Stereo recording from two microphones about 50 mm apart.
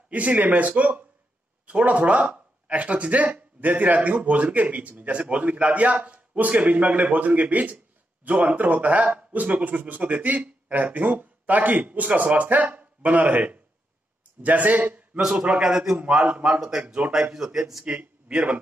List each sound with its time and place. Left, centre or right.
0.1 s speech: right
15.1 s speech: centre
15.6 s speech: centre
16.0 s speech: right
17.1 s speech: centre
18.3 s speech: right